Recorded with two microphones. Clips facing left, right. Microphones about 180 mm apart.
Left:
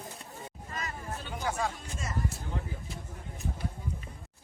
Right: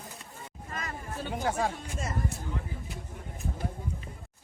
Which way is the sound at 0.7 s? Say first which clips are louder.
Right 1 dB; 50° right (ahead or behind).